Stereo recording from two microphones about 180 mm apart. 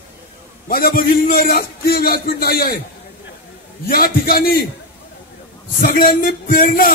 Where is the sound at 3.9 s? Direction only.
55° left (ahead or behind).